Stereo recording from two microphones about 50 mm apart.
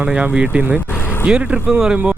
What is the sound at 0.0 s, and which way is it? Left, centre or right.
Speech, right.